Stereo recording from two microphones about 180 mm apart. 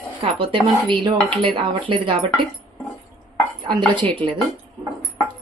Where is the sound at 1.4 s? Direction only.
30° right (ahead or behind).